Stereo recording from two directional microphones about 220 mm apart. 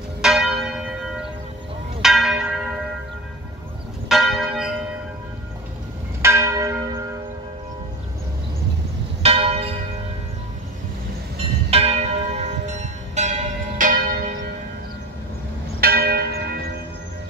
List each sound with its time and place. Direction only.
0.2 s church bell: centre (ahead or behind)
4.1 s church bell: centre (ahead or behind)
6.2 s church bell: 15° right (ahead or behind)
9.2 s church bell: 25° right (ahead or behind)
11.7 s church bell: 30° right (ahead or behind)
15.8 s church bell: 45° right (ahead or behind)